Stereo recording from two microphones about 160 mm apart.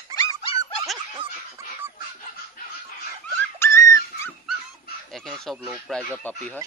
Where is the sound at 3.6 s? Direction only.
15° left (ahead or behind).